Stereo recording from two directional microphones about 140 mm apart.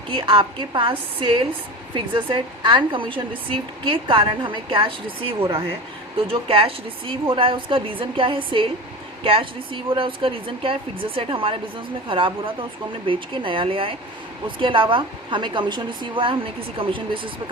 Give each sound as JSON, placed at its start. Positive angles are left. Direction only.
{"t": 0.1, "sound": "a woman's voice", "side_deg": -40}